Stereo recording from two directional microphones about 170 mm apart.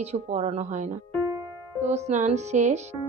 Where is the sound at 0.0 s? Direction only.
40° right (ahead or behind).